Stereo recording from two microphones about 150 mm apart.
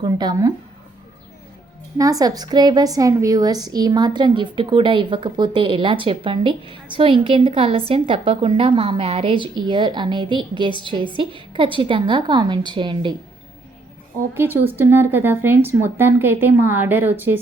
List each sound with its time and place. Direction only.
0.0 s speech: 30° right (ahead or behind)
2.0 s a woman's voice: 25° right (ahead or behind)
14.3 s a woman's voice: 15° right (ahead or behind)